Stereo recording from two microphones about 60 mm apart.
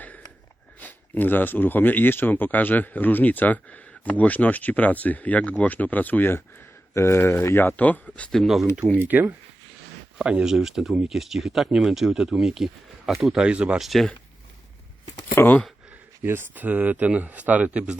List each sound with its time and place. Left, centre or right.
0.8 s speech: left
6.9 s speech: left
7.4 s speech: left
7.8 s speech: left
8.3 s speech: centre
9.0 s speech: right
10.2 s speech: centre
13.4 s speech: centre
13.7 s speech: centre
15.4 s speech: left
16.2 s speech: right